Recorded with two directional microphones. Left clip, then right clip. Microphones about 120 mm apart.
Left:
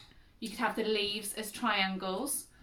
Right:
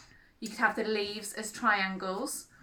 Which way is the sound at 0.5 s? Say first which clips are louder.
Right 3 dB; 15° left (ahead or behind).